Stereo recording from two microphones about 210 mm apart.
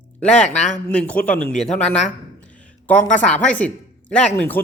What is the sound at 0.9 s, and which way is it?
Speech, 5° left (ahead or behind).